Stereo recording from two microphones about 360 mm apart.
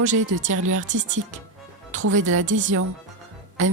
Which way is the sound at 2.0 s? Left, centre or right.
Right.